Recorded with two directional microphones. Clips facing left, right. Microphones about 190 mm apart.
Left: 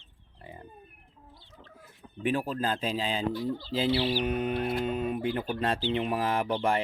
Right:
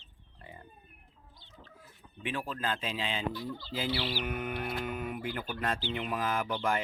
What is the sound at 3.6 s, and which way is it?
Chicken, 30° left (ahead or behind).